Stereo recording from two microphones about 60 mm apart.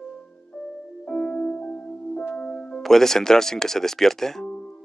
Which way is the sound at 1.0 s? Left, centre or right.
Centre.